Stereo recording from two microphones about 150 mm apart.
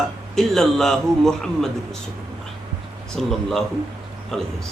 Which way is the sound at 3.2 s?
Centre (ahead or behind).